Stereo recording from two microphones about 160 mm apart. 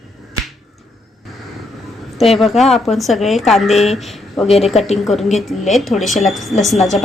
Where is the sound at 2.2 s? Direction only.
Centre (ahead or behind).